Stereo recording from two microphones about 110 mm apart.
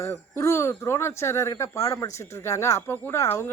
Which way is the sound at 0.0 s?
25° left (ahead or behind).